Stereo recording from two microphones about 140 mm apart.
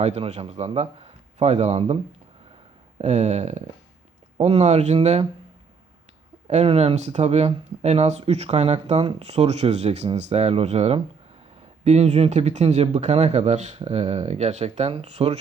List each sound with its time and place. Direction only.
0.0 s speech: 50° right (ahead or behind)
3.0 s speech: 55° right (ahead or behind)
6.5 s speech: 50° right (ahead or behind)